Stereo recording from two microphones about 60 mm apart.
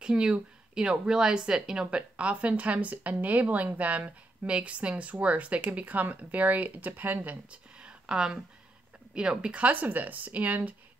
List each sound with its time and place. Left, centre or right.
0.0 s speech: centre; by 7.3 s right
7.8 s a sound: centre
9.1 s speech: centre